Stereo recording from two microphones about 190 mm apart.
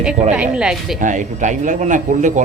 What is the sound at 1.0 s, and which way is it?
Speech, 40° right (ahead or behind).